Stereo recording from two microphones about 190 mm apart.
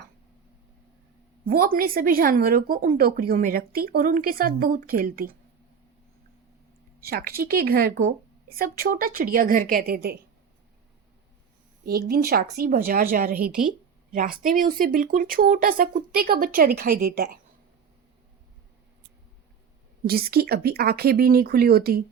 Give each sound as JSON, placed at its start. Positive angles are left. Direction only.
{"t": 1.5, "sound": "a woman's voice", "side_deg": -50}
{"t": 7.0, "sound": "a woman's voice", "side_deg": -50}
{"t": 11.9, "sound": "a woman's voice", "side_deg": -55}
{"t": 20.1, "sound": "a woman's voice", "side_deg": -55}